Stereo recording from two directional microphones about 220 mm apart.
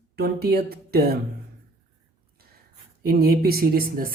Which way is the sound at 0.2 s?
45° right (ahead or behind).